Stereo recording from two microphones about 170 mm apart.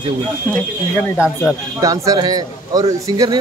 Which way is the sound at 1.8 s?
20° right (ahead or behind).